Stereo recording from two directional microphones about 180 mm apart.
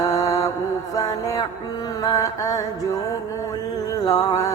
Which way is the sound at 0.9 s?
20° left (ahead or behind).